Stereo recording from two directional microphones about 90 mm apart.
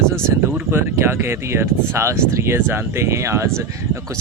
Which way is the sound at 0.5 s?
25° right (ahead or behind).